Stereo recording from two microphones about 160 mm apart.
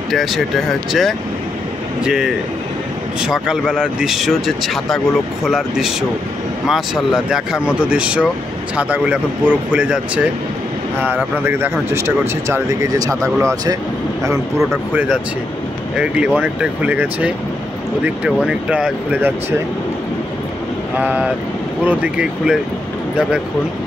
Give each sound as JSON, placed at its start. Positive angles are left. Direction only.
{"t": 0.1, "sound": "speech", "side_deg": 0}
{"t": 11.3, "sound": "speech", "side_deg": -15}
{"t": 16.0, "sound": "speech", "side_deg": -5}
{"t": 21.0, "sound": "speech", "side_deg": -10}